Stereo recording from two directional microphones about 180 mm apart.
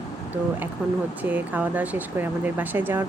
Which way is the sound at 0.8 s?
5° right (ahead or behind).